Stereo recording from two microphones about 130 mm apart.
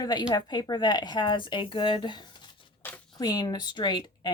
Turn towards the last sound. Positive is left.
turn(degrees=35)  # may be behind; listen again after turning